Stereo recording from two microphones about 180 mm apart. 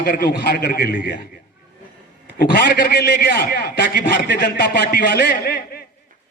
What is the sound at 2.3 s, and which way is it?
A man's voice, 55° left (ahead or behind).